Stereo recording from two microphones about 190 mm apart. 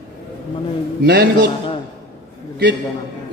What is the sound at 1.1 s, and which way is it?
Speech, 55° right (ahead or behind).